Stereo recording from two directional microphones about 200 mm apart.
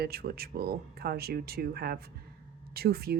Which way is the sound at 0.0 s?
50° right (ahead or behind).